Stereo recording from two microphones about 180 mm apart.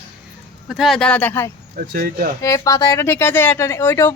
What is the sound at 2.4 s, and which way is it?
Speech, 20° left (ahead or behind).